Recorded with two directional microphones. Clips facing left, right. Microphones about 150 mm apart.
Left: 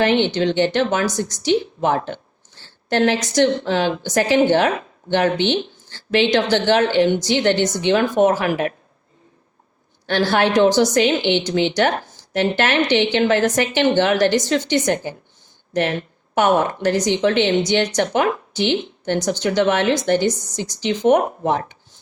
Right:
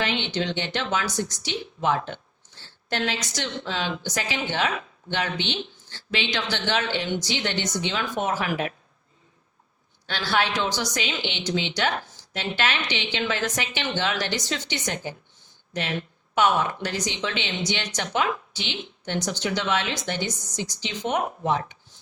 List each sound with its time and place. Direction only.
0.0 s speech: 50° left (ahead or behind)
10.1 s speech: 50° left (ahead or behind)